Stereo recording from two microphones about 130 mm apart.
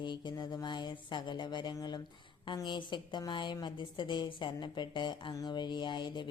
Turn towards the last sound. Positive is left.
turn(degrees=35)  # may be behind; listen again after turning